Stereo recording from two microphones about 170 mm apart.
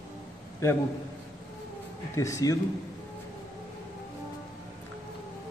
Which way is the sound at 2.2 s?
20° left (ahead or behind).